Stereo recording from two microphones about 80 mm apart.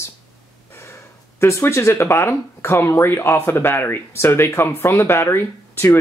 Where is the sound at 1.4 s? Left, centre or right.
Left.